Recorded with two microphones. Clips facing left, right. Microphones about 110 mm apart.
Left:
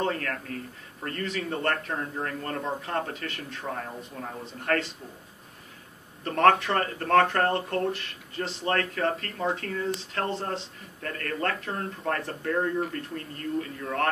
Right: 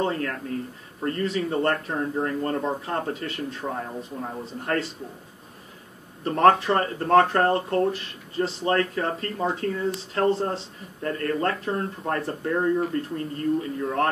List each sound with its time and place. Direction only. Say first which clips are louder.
0.0 s speech: right 3 dB; 25° right (ahead or behind)
6.2 s speech: right 3 dB; 30° right (ahead or behind)